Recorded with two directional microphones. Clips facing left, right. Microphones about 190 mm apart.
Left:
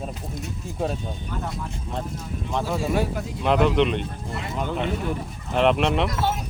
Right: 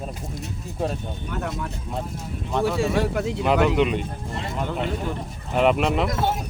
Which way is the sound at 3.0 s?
70° right (ahead or behind).